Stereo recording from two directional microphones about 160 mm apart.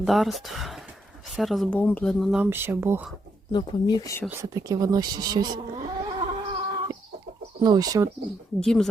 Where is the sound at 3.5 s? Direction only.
25° left (ahead or behind).